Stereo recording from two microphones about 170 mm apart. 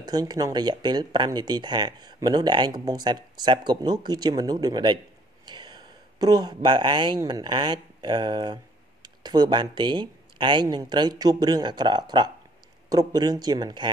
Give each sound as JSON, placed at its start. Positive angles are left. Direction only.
{"t": 0.0, "sound": "speech", "side_deg": -25}